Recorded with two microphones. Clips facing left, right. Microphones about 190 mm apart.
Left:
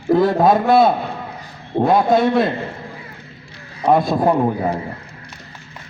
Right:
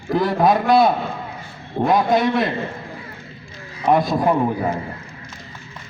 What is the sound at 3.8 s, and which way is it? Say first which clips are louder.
Speech: left 2 dB; 65° left (ahead or behind).